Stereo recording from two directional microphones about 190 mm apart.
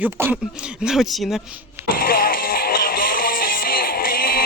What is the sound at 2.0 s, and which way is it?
Music, 50° left (ahead or behind).